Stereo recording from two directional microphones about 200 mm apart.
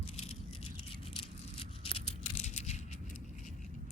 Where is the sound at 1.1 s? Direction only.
30° left (ahead or behind).